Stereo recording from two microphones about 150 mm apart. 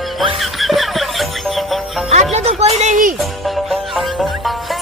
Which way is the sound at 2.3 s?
45° right (ahead or behind).